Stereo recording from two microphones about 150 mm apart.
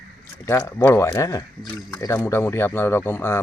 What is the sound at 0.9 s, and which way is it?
Speech, 15° left (ahead or behind).